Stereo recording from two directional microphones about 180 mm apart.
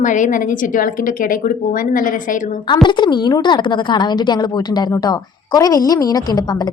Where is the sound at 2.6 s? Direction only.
25° left (ahead or behind).